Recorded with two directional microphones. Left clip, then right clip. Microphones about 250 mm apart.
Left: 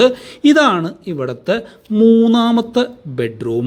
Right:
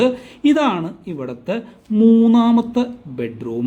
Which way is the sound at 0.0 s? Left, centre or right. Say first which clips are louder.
Left 5 dB; centre.